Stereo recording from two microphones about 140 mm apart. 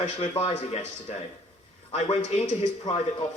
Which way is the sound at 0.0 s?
50° left (ahead or behind).